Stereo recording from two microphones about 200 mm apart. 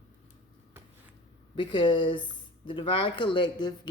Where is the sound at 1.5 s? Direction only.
25° left (ahead or behind).